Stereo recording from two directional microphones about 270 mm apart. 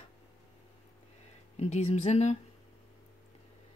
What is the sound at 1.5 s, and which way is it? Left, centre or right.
Speech, left.